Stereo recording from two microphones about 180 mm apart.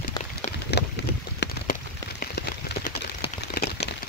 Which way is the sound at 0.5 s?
65° left (ahead or behind).